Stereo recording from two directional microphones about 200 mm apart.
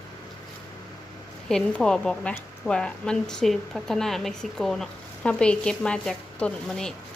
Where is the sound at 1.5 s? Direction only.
5° left (ahead or behind).